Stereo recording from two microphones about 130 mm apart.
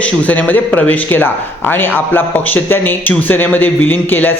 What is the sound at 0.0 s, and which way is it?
Speech, 10° left (ahead or behind).